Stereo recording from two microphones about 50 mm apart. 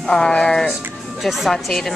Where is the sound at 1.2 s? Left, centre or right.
Centre.